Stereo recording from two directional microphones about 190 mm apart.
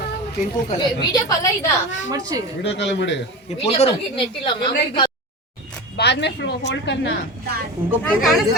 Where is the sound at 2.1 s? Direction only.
20° right (ahead or behind).